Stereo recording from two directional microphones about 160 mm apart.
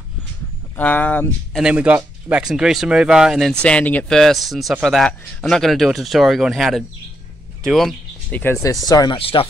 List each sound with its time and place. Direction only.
0.7 s speech: 10° left (ahead or behind)
1.6 s speech: 10° right (ahead or behind)
8.4 s speech: 15° left (ahead or behind)
9.2 s speech: 35° left (ahead or behind)